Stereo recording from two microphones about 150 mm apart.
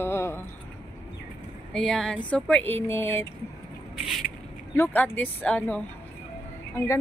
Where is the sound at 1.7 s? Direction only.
5° left (ahead or behind).